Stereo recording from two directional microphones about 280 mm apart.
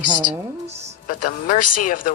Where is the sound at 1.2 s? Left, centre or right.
Left.